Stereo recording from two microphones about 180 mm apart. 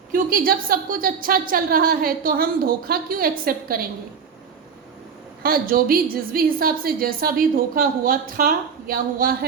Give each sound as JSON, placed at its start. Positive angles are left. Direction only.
{"t": 0.1, "sound": "a woman's voice", "side_deg": -50}
{"t": 5.4, "sound": "a woman's voice", "side_deg": -55}